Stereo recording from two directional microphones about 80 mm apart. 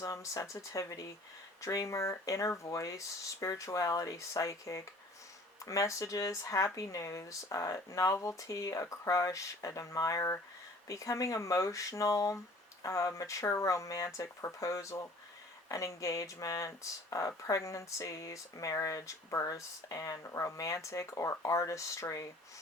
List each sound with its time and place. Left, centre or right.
0.0 s speech: left